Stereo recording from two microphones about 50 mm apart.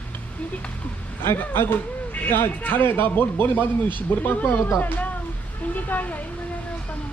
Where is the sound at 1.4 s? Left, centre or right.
Left.